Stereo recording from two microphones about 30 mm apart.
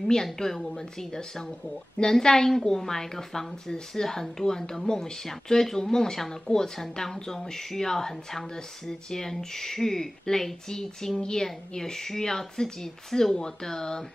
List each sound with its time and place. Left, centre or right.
0.1 s speech: centre